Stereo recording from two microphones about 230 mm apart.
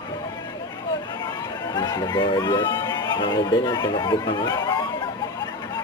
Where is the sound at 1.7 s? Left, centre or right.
Centre.